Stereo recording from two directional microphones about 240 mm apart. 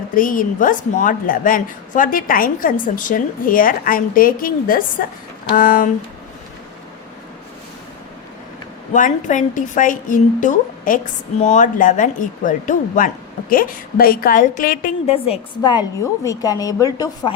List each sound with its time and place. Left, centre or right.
0.1 s a woman's voice: left
8.9 s a woman's voice: left; by 17.3 s centre